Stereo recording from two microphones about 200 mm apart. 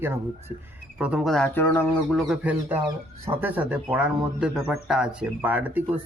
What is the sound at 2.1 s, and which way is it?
Speech, centre (ahead or behind).